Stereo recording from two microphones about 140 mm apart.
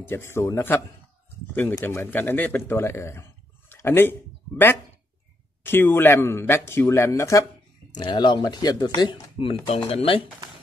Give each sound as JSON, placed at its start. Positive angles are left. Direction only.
{"t": 0.0, "sound": "speech", "side_deg": 15}